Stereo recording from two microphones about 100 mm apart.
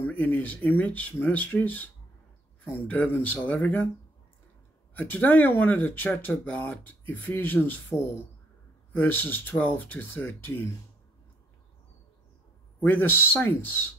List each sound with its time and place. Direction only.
0.0 s speech: 15° left (ahead or behind)
4.9 s speech: 20° left (ahead or behind)
12.8 s speech: 20° left (ahead or behind)